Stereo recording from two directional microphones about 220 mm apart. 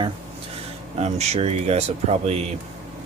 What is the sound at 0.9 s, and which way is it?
Speech, 30° right (ahead or behind).